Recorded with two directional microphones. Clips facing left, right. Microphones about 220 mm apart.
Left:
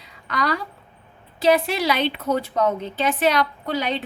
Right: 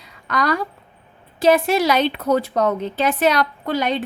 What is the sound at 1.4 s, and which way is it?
A woman's voice, 50° right (ahead or behind).